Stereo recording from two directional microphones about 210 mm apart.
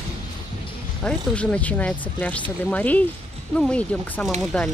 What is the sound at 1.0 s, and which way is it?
Speech, 5° left (ahead or behind).